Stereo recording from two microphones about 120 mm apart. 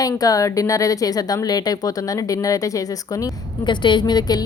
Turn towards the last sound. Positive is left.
turn(degrees=35)  # may be behind; listen again after turning